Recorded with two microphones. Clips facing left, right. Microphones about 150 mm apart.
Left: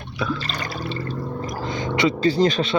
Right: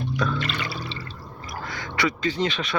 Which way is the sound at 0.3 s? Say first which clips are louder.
Even; 35° left (ahead or behind).